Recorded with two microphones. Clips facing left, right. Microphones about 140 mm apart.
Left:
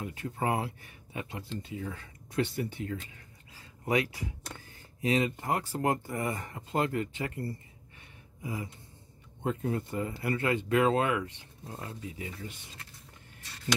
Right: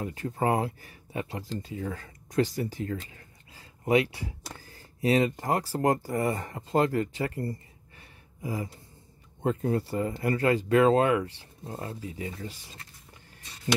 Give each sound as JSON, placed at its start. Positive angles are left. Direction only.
{"t": 0.0, "sound": "speech", "side_deg": -40}
{"t": 3.5, "sound": "speech", "side_deg": -25}